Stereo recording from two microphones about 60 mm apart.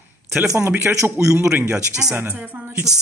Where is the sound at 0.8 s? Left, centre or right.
Right.